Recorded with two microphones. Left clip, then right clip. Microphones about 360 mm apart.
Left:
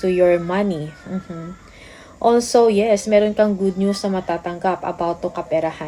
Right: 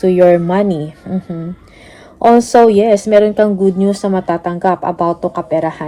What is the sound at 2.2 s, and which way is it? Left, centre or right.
A woman's voice, centre.